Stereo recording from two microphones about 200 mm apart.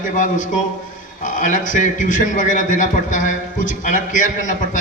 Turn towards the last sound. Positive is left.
turn(degrees=40)  # may be behind; listen again after turning